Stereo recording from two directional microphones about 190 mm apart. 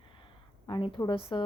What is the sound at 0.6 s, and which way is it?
Speech, 25° left (ahead or behind).